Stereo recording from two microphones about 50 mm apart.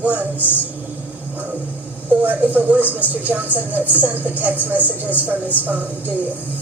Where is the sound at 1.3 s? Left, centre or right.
Right.